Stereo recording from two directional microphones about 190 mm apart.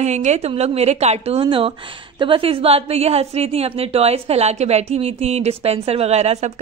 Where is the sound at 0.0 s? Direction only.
35° right (ahead or behind).